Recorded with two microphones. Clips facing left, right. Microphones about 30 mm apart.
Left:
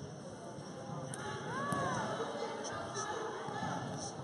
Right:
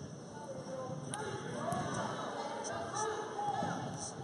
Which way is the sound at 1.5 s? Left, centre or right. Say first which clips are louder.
Left 1 dB; left.